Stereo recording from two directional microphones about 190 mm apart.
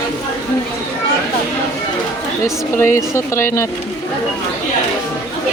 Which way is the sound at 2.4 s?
15° left (ahead or behind).